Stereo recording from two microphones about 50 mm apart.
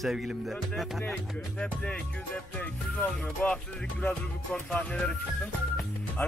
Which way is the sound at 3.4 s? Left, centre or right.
Left.